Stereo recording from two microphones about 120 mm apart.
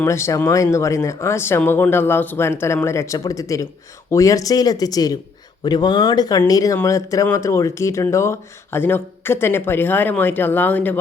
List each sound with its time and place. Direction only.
0.0 s speech: 25° left (ahead or behind)